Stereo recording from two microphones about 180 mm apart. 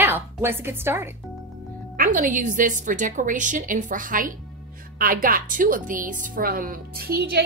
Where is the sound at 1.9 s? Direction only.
45° right (ahead or behind).